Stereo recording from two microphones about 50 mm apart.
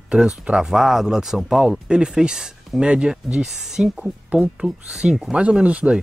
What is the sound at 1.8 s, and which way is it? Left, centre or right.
Speech, centre.